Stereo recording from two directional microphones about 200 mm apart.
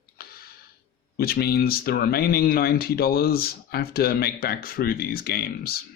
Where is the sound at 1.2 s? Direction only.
50° left (ahead or behind).